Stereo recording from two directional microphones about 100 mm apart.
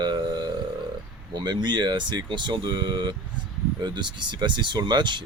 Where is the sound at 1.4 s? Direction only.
50° right (ahead or behind).